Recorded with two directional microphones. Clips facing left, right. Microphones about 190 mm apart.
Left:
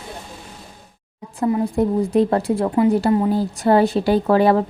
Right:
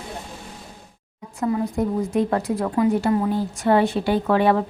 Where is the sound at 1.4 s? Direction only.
30° left (ahead or behind).